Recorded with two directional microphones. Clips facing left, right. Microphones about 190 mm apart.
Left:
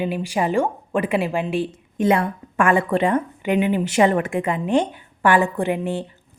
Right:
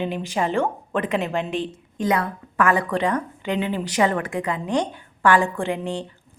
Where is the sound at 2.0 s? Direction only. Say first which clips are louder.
Left 4 dB; 25° left (ahead or behind).